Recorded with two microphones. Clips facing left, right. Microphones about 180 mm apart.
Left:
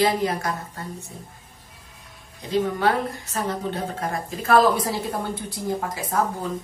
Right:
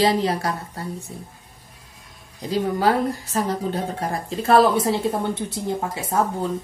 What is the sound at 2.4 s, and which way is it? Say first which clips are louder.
Speech: right 1 dB; 35° right (ahead or behind).